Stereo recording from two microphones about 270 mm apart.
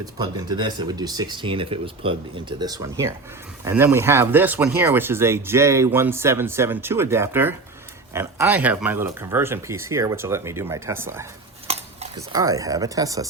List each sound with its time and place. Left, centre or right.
0.0 s speech: centre
11.7 s a sound: right
12.3 s speech: centre